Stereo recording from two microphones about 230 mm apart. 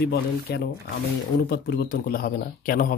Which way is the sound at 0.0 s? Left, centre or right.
Left.